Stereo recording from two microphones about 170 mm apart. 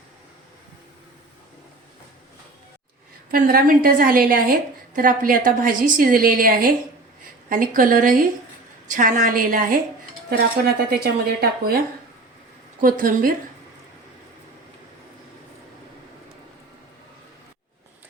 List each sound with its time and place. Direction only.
3.3 s a woman's voice: 55° right (ahead or behind)
10.2 s a woman's voice: 65° right (ahead or behind)
12.8 s a woman's voice: 55° right (ahead or behind)